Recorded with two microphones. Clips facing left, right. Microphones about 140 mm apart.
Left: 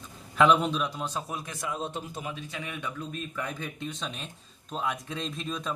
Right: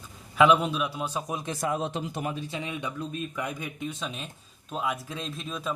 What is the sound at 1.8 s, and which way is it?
Speech, 90° right.